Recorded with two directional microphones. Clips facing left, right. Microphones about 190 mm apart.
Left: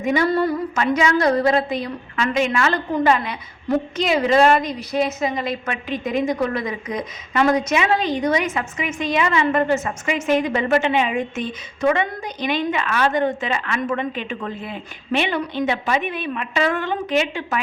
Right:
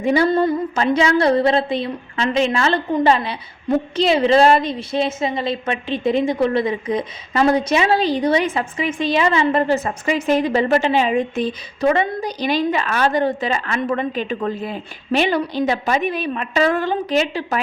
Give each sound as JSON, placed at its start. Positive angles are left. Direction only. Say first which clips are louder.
{"t": 0.0, "sound": "a woman's voice", "louder": "right 3 dB", "side_deg": -30}